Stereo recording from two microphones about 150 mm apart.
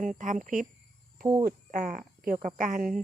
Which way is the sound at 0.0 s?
60° right (ahead or behind).